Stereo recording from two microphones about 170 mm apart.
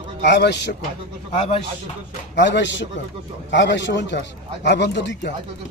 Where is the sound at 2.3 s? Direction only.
90° left.